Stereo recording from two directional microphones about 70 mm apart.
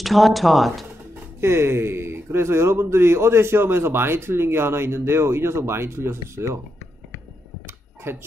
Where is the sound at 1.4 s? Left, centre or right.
Right.